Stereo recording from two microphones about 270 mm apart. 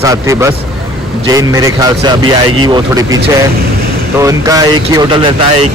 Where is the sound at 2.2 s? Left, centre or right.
Right.